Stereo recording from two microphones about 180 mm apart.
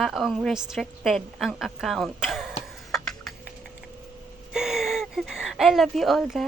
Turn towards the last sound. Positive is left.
turn(degrees=0)  # may be behind; listen again after turning